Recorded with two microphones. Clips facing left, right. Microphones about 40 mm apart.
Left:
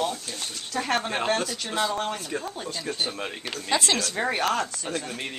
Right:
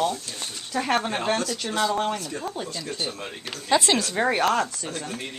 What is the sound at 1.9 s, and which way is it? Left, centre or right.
Speech, centre.